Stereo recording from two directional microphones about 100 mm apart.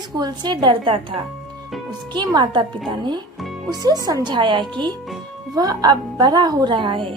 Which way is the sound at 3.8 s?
40° right (ahead or behind).